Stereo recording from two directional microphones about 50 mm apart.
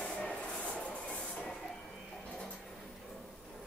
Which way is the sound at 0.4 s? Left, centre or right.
Left.